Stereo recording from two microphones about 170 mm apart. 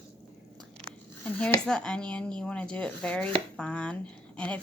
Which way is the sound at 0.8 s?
35° right (ahead or behind).